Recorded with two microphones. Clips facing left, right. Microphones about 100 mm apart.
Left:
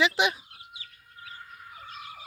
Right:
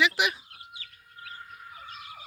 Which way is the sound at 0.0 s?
30° left (ahead or behind).